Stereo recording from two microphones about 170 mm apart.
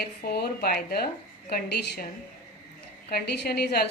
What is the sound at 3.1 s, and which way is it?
Speech, 70° left (ahead or behind).